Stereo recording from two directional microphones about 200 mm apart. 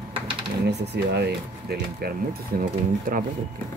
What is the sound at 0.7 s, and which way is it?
Speech, 55° right (ahead or behind).